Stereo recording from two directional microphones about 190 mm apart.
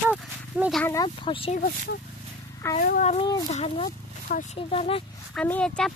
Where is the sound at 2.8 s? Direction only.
40° left (ahead or behind).